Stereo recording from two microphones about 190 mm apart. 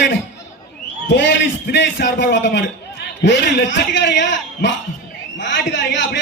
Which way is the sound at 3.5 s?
65° left (ahead or behind).